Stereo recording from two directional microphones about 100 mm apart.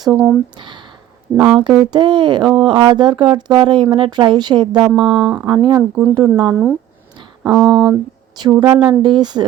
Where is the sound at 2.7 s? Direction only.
55° right (ahead or behind).